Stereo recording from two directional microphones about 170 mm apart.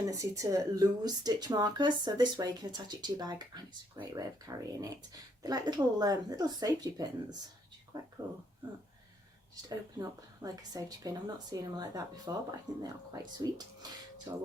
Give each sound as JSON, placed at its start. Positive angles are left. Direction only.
{"t": 0.0, "sound": "speech", "side_deg": -20}
{"t": 9.6, "sound": "speech", "side_deg": -20}
{"t": 14.3, "sound": "speech", "side_deg": -20}